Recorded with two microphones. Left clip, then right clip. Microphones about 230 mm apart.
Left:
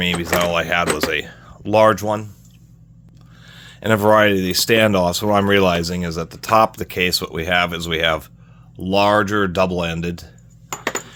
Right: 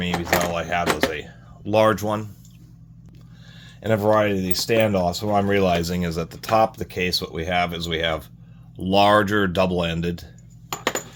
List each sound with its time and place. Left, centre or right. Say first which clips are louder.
0.3 s speech: left 5 dB; left
1.1 s a sound: left 9 dB; left
1.7 s speech: left 4 dB; left
3.5 s speech: left 4 dB; left
8.7 s speech: left 1 dB; centre